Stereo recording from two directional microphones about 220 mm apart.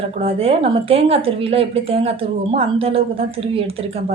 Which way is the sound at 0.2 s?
25° right (ahead or behind).